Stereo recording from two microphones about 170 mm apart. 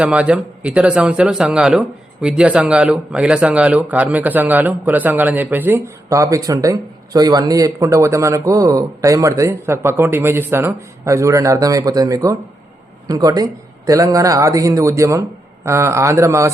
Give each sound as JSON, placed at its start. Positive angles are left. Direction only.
{"t": 0.0, "sound": "a man's voice", "side_deg": -5}